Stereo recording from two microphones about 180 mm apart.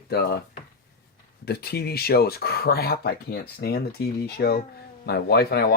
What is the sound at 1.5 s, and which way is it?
Speech, 60° left (ahead or behind).